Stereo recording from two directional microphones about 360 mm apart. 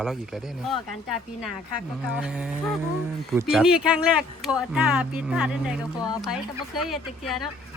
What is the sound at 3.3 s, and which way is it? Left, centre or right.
Speech, centre.